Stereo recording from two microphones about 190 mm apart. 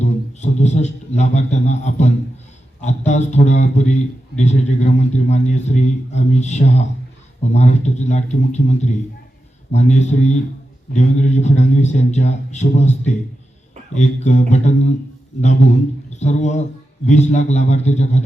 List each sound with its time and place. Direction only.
0.0 s a sound: 35° left (ahead or behind)
2.8 s a man's voice: 35° left (ahead or behind)
16.1 s a man's voice: 35° left (ahead or behind)